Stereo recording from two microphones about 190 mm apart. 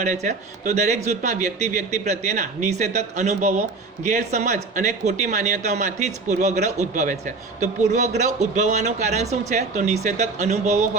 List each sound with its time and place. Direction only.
0.0 s a man's voice: 40° right (ahead or behind)